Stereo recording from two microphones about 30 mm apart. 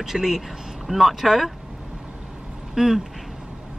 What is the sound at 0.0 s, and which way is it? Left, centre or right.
Speech, centre.